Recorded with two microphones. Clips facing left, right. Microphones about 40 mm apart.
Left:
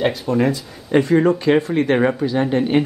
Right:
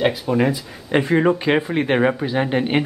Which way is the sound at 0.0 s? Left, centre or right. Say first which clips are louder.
Even; centre.